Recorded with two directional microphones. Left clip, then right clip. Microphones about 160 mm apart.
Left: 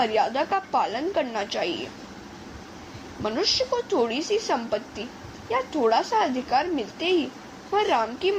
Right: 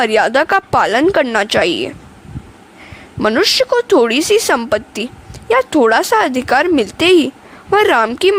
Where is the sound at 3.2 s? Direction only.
75° right (ahead or behind).